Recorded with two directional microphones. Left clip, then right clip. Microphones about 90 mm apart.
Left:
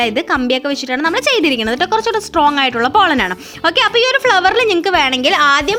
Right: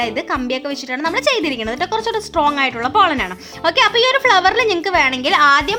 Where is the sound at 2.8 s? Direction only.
80° left.